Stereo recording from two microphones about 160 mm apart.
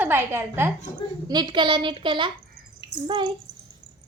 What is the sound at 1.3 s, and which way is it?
A child's voice, 30° right (ahead or behind).